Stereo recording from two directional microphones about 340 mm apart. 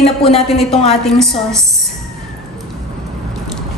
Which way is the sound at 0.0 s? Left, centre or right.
Centre.